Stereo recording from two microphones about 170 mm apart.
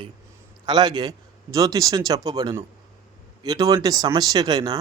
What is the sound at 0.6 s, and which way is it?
Speech, 25° right (ahead or behind).